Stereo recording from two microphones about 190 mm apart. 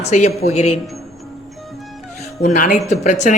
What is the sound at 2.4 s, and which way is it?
Speech, 45° left (ahead or behind).